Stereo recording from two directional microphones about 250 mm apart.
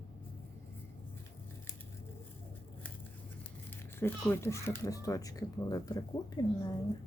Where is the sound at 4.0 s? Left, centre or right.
Centre.